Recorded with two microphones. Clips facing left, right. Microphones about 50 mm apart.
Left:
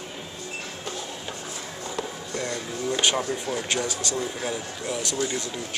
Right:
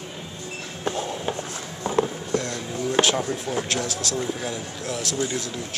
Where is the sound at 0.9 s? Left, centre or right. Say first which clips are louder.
Right 11 dB; right.